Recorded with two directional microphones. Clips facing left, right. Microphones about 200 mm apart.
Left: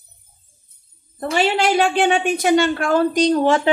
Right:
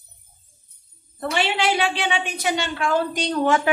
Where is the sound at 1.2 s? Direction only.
45° left (ahead or behind).